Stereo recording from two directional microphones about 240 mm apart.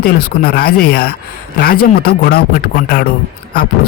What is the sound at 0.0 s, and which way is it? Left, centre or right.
Speech, left.